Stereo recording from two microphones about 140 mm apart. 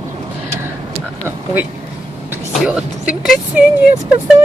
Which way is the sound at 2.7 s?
10° right (ahead or behind).